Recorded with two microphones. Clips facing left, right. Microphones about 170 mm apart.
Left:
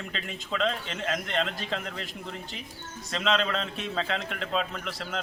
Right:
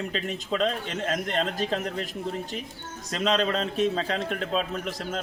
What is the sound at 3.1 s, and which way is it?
A man's voice, 40° right (ahead or behind).